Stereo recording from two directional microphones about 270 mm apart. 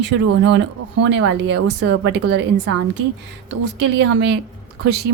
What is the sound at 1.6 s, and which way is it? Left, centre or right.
Speech, right.